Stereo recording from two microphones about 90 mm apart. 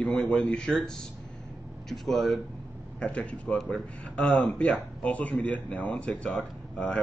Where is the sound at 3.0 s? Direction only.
15° left (ahead or behind).